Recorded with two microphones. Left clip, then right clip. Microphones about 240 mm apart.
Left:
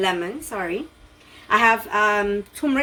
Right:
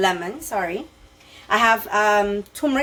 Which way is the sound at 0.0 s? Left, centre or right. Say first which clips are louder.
Right 2 dB; right.